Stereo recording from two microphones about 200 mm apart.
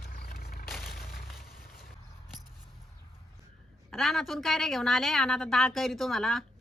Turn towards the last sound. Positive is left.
turn(degrees=0)  # may be behind; listen again after turning